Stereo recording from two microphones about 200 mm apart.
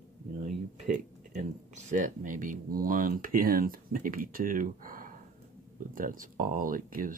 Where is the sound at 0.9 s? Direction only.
40° right (ahead or behind).